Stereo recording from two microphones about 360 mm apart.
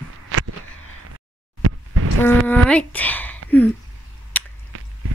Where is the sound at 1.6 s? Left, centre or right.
Right.